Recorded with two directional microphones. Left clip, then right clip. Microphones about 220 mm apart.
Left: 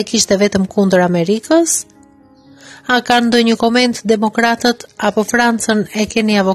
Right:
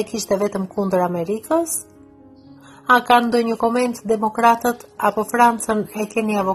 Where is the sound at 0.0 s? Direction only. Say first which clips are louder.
Left 7 dB; 40° left (ahead or behind).